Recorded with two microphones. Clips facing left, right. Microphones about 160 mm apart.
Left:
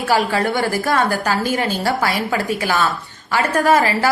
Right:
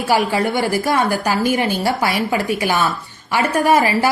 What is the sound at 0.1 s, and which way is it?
A woman's voice, 20° right (ahead or behind).